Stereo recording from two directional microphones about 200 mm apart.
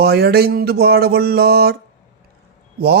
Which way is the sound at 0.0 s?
50° right (ahead or behind).